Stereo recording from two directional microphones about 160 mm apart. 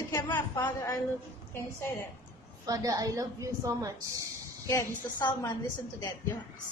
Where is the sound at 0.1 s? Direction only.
20° left (ahead or behind).